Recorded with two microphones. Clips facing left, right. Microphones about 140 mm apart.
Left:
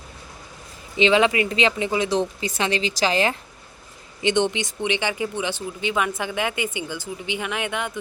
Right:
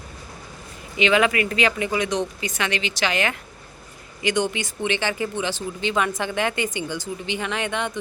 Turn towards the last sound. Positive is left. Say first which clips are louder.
# right 1 dB
turn(degrees=10)  # may be behind; listen again after turning